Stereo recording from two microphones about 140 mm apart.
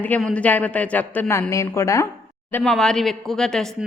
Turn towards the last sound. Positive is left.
turn(degrees=5)  # may be behind; listen again after turning